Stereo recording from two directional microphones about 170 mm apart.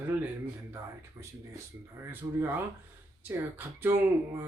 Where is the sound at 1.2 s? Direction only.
20° right (ahead or behind).